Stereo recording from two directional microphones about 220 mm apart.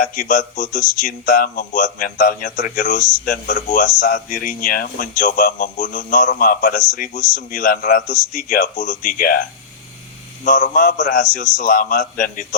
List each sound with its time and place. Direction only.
0.0 s speech: 40° left (ahead or behind)